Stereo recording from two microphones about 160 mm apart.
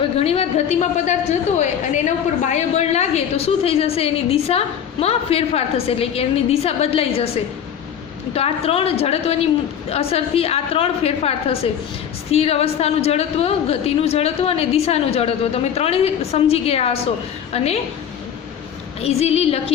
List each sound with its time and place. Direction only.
0.2 s a woman's voice: 40° left (ahead or behind)
8.4 s a woman's voice: 40° left (ahead or behind)
19.0 s a woman's voice: 40° left (ahead or behind)